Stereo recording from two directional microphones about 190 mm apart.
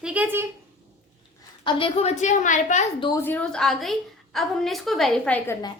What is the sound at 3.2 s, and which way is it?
A woman's voice, 10° left (ahead or behind).